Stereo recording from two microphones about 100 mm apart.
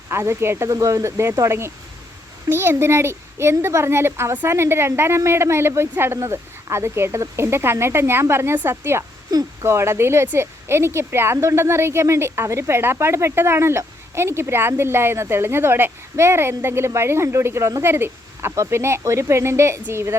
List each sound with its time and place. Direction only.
0.1 s speech: 25° right (ahead or behind)
9.3 s speech: 40° right (ahead or behind)
9.6 s speech: 25° right (ahead or behind)